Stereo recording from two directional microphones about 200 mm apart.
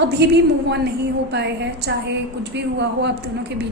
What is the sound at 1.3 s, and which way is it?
A woman's voice, 60° right (ahead or behind).